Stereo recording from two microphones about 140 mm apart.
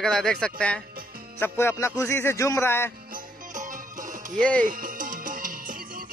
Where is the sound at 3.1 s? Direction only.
70° right (ahead or behind).